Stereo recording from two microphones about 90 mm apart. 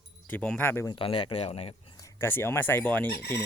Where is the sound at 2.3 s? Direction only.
25° left (ahead or behind).